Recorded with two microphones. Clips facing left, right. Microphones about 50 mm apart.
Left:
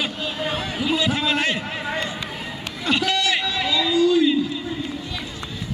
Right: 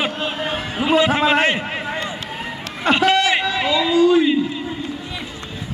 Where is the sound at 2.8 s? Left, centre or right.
Right.